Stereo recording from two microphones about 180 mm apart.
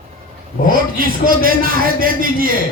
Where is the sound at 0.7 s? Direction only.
55° right (ahead or behind).